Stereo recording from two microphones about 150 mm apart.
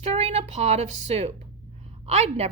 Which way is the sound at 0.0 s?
45° right (ahead or behind).